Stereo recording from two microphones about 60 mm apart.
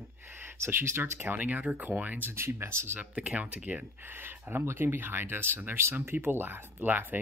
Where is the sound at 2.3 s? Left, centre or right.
Right.